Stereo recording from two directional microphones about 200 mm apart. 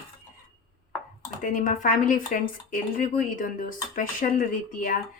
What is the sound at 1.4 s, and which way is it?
Speech, 40° left (ahead or behind).